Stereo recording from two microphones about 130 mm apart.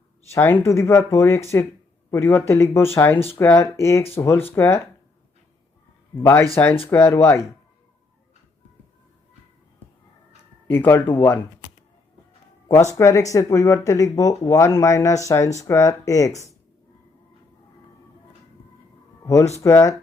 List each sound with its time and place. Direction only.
0.3 s speech: 15° left (ahead or behind)
6.2 s speech: 20° left (ahead or behind)
10.7 s speech: 15° left (ahead or behind)
12.9 s speech: 25° left (ahead or behind)
19.2 s speech: 25° left (ahead or behind)